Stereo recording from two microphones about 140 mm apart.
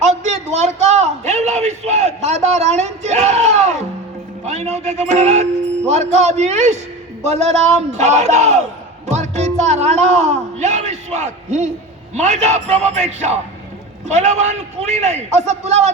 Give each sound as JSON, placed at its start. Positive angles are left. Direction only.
{"t": 0.0, "sound": "a sound", "side_deg": -55}
{"t": 4.4, "sound": "music", "side_deg": -55}
{"t": 5.9, "sound": "a man's voice", "side_deg": -55}
{"t": 9.0, "sound": "music", "side_deg": -55}
{"t": 12.1, "sound": "a man's voice", "side_deg": -55}